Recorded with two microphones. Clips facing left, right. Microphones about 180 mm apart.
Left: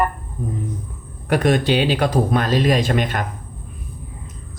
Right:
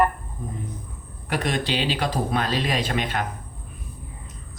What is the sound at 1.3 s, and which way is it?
Speech, 50° left (ahead or behind).